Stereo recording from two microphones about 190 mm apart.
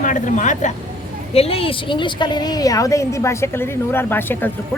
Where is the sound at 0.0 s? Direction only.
40° left (ahead or behind).